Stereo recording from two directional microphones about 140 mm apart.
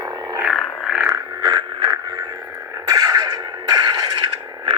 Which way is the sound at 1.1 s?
25° right (ahead or behind).